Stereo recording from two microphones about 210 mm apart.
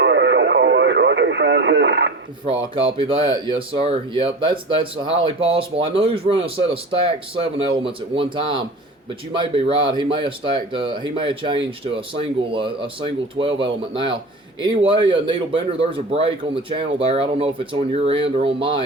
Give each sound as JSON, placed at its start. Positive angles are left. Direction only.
{"t": 0.0, "sound": "radio", "side_deg": -60}
{"t": 2.5, "sound": "speech", "side_deg": -25}